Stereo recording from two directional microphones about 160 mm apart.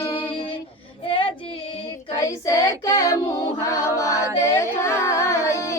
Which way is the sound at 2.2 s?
20° left (ahead or behind).